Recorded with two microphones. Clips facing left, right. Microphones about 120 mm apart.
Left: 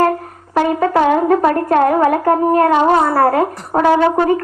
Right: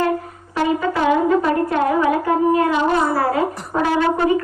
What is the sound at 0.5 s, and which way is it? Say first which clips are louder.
Brass instrument: left 5 dB; 55° left (ahead or behind).